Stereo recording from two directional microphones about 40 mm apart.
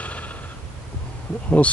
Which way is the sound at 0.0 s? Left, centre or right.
Left.